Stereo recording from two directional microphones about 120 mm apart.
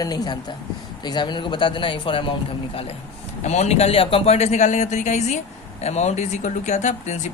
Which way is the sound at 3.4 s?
70° left (ahead or behind).